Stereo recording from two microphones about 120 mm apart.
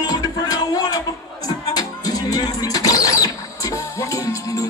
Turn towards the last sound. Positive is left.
turn(degrees=25)  # may be behind; listen again after turning